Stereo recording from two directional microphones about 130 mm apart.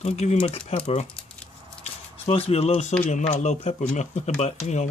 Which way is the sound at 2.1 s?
50° left (ahead or behind).